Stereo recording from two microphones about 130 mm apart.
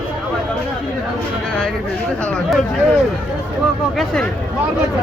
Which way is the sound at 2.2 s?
5° left (ahead or behind).